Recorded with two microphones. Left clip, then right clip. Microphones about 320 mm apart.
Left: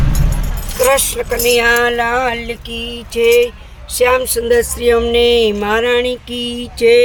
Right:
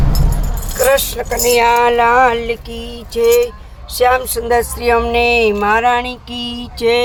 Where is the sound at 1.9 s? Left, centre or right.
Centre.